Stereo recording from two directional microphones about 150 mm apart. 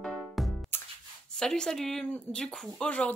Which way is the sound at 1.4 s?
5° left (ahead or behind).